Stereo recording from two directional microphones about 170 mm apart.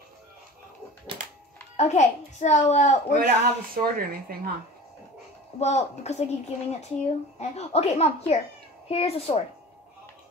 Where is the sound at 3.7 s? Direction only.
60° right (ahead or behind).